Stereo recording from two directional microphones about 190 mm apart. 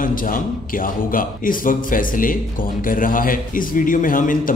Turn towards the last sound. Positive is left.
turn(degrees=45)  # may be behind; listen again after turning